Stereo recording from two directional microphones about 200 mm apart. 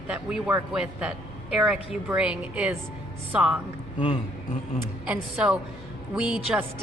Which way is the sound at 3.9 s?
25° left (ahead or behind).